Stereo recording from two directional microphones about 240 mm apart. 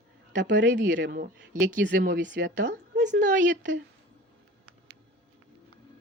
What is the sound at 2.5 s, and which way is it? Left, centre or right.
A woman's voice, right.